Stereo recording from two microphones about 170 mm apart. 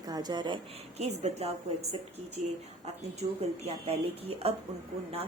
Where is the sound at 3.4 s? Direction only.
40° right (ahead or behind).